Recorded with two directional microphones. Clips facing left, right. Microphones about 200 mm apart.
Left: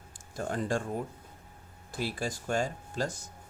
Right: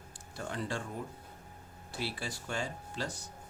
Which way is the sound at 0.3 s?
45° left (ahead or behind).